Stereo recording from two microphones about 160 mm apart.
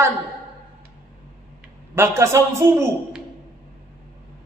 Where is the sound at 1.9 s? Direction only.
15° right (ahead or behind).